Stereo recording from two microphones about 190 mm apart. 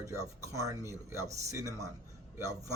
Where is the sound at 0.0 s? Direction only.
15° right (ahead or behind).